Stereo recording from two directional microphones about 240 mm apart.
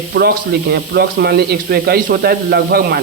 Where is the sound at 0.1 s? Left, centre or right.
Right.